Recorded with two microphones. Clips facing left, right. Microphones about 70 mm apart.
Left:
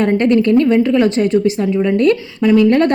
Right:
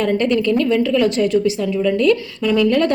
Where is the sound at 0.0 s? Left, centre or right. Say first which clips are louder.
Left 4 dB; left.